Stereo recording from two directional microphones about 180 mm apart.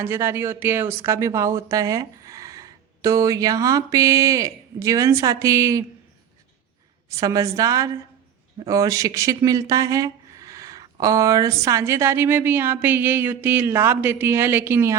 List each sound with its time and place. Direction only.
0.0 s speech: 15° right (ahead or behind)
7.1 s a woman's voice: 20° right (ahead or behind)